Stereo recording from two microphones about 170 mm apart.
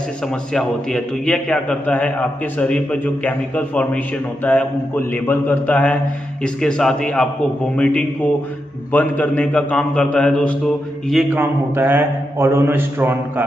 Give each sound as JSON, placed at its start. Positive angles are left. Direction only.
{"t": 0.3, "sound": "a man's voice", "side_deg": 5}
{"t": 11.3, "sound": "a man's voice", "side_deg": -10}